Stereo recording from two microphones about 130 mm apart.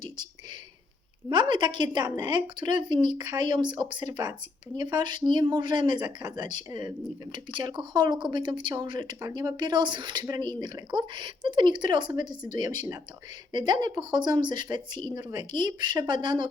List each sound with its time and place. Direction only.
1.3 s speech: 35° right (ahead or behind)